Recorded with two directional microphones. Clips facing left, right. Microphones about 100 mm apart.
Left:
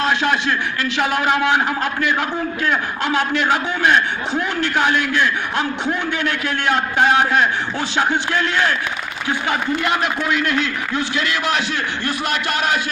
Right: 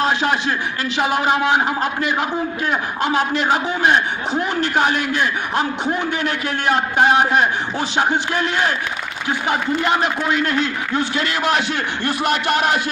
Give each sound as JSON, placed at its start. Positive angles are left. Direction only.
{"t": 0.0, "sound": "a man's voice", "side_deg": -30}